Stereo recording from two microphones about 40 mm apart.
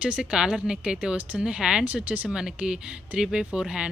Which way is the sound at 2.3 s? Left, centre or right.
Centre.